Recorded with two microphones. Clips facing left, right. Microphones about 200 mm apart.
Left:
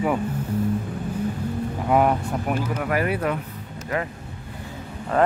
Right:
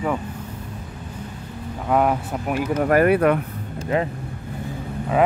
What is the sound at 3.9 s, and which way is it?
Speech, 20° right (ahead or behind).